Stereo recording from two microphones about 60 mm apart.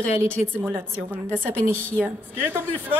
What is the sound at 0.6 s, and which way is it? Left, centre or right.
A woman's voice, right.